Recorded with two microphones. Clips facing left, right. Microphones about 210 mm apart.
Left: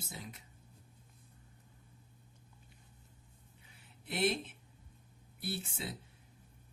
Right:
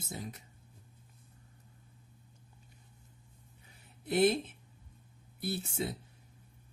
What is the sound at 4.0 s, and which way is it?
Speech, 45° right (ahead or behind).